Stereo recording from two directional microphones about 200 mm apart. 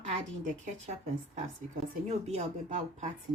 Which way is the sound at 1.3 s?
30° right (ahead or behind).